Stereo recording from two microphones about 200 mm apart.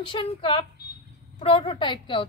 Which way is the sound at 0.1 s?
25° left (ahead or behind).